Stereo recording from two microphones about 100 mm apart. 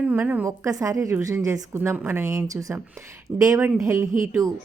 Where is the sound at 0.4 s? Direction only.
35° right (ahead or behind).